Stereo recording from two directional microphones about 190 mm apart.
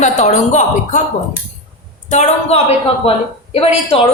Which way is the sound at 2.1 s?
35° left (ahead or behind).